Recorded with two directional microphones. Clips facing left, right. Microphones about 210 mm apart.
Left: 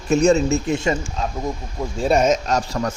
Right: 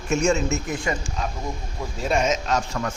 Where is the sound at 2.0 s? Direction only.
40° left (ahead or behind).